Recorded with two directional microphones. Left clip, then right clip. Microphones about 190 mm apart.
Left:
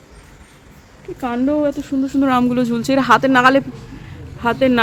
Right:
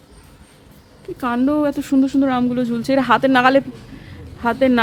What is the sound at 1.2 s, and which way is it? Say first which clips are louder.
Speech: even; 25° right (ahead or behind).